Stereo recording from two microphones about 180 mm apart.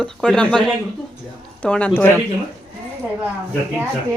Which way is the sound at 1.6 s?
5° left (ahead or behind).